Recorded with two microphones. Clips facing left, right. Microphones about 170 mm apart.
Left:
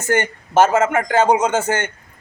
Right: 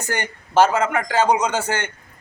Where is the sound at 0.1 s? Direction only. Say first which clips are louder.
Left 6 dB; 50° left (ahead or behind).